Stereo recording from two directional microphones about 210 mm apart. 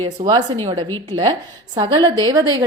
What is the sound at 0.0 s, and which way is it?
A woman's voice, 25° right (ahead or behind).